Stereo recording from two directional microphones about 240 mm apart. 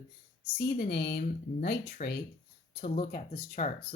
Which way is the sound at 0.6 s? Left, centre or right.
Left.